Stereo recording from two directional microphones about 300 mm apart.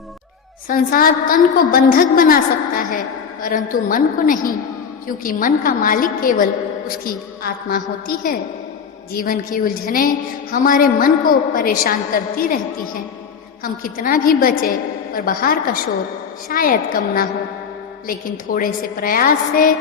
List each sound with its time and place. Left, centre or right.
0.7 s a woman's voice: left